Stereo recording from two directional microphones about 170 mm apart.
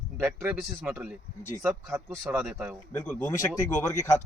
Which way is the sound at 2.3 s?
5° right (ahead or behind).